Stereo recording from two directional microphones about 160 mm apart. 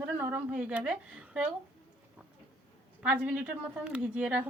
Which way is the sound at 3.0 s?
10° right (ahead or behind).